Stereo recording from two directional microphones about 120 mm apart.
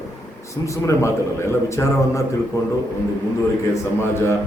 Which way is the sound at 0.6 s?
25° left (ahead or behind).